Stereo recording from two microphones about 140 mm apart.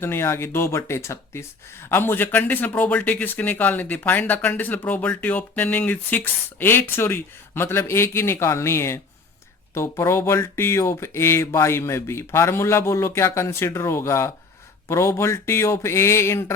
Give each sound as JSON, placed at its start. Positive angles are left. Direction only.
{"t": 0.0, "sound": "speech", "side_deg": 15}